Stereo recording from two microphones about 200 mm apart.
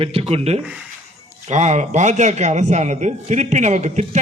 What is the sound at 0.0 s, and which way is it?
A man's voice, 30° right (ahead or behind).